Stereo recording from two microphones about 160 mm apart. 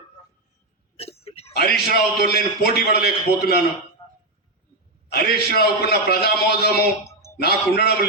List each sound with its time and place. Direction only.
0.9 s hiccup: 40° left (ahead or behind)
1.5 s a man's voice: 75° left (ahead or behind)
5.0 s a man's voice: 80° left